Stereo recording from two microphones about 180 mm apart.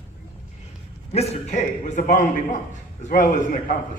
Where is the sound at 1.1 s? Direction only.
35° left (ahead or behind).